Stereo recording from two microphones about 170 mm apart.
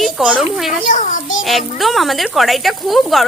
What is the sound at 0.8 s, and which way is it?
Speech, 50° left (ahead or behind).